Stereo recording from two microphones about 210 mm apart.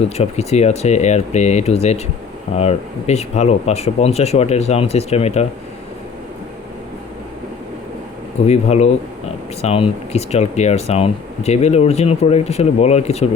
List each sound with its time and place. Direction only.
0.0 s speech: 30° left (ahead or behind)
8.4 s speech: 30° left (ahead or behind)